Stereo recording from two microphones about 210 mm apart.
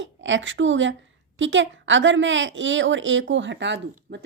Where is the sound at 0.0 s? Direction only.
60° right (ahead or behind).